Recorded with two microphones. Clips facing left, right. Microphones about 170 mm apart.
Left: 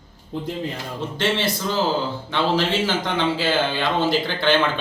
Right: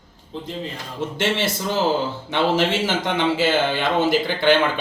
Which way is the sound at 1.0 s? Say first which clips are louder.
Right 1 dB; 25° right (ahead or behind).